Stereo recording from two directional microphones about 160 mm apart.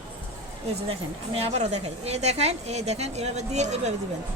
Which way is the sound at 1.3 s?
40° right (ahead or behind).